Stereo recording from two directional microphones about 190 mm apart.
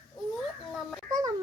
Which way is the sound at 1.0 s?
20° right (ahead or behind).